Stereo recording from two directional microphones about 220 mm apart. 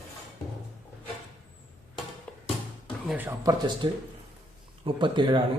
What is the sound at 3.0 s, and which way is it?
Speech, 10° right (ahead or behind).